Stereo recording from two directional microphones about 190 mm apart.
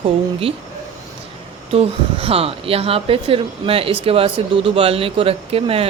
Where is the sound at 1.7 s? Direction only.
30° right (ahead or behind).